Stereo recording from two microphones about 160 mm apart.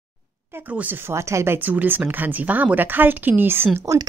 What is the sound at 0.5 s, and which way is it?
A woman's voice, 10° right (ahead or behind).